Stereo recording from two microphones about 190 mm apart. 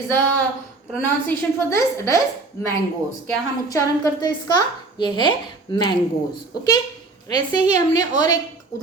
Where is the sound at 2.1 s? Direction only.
15° left (ahead or behind).